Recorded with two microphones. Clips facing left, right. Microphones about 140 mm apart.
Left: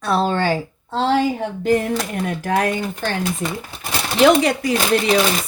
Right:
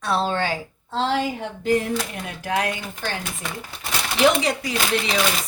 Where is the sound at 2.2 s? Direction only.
50° left (ahead or behind).